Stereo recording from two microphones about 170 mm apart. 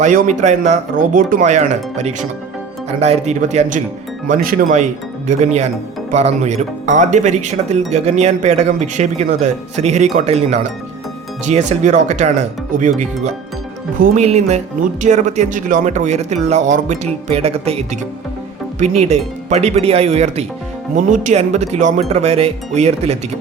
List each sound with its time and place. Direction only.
0.0 s speech: 50° right (ahead or behind)
4.3 s speech: 55° right (ahead or behind); by 23.1 s 40° right (ahead or behind)